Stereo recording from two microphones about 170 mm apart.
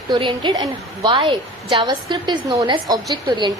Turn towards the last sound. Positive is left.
turn(degrees=-25)  # may be behind; listen again after turning